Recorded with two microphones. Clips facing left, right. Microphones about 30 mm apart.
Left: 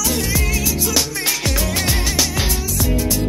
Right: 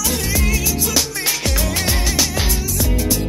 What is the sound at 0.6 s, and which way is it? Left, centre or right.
Music, right.